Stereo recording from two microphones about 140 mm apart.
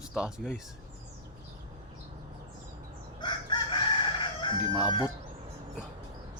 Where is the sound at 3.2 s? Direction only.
35° left (ahead or behind).